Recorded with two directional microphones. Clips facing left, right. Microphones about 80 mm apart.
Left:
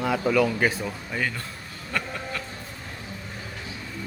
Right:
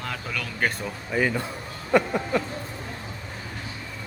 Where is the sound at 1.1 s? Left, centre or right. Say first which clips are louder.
Right 9 dB; centre.